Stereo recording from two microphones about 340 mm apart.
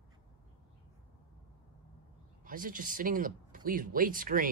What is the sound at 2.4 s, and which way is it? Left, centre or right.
Speech, right.